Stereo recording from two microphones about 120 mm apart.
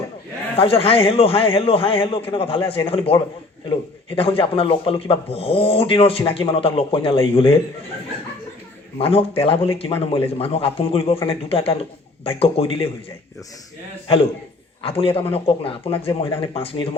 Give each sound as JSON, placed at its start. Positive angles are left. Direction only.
{"t": 0.5, "sound": "speech", "side_deg": 55}
{"t": 9.0, "sound": "speech", "side_deg": 50}
{"t": 14.8, "sound": "speech", "side_deg": 50}